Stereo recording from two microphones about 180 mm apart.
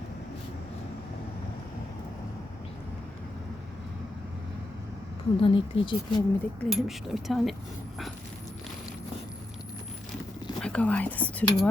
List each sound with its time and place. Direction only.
5.4 s speech: 30° left (ahead or behind)
6.6 s speech: centre (ahead or behind)
10.6 s speech: 5° left (ahead or behind)